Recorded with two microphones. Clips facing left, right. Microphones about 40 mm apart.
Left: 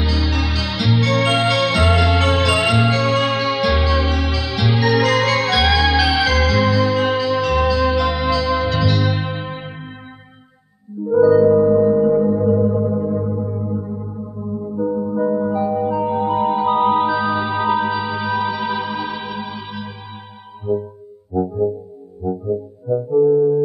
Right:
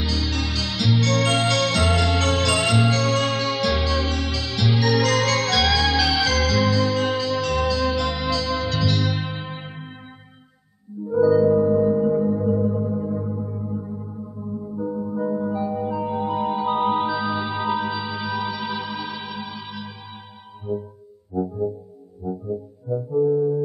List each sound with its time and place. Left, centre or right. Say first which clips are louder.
0.0 s music: left 4 dB; centre
11.1 s singing bowl: left 5 dB; centre
20.7 s music: left 7 dB; centre
22.2 s music: left 6 dB; left
23.1 s music: left 6 dB; centre